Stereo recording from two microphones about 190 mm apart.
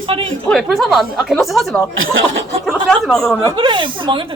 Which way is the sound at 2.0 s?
85° right.